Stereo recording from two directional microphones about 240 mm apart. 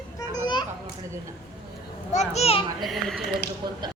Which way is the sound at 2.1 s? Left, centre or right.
Left.